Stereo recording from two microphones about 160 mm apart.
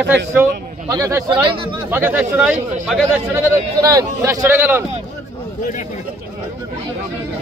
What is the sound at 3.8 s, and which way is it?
A man's voice, 20° right (ahead or behind).